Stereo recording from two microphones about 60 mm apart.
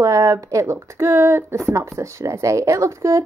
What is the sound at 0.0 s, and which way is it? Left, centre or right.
Speech, right.